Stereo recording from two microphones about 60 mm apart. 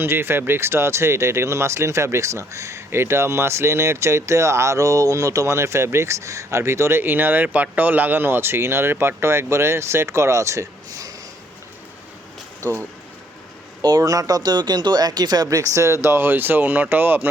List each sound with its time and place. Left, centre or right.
0.0 s speech: right
6.6 s speech: right
12.6 s speech: right
13.9 s speech: right